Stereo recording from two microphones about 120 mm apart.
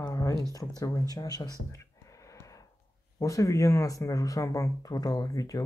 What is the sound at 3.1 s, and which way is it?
Speech, 25° left (ahead or behind).